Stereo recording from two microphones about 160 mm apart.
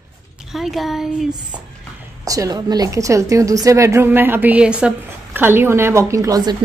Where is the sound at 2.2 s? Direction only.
20° right (ahead or behind).